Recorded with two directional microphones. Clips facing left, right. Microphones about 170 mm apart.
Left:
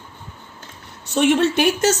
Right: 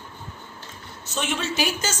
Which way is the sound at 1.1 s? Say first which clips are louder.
Left 12 dB; 60° left (ahead or behind).